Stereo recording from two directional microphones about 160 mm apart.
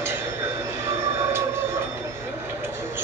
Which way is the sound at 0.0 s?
15° right (ahead or behind).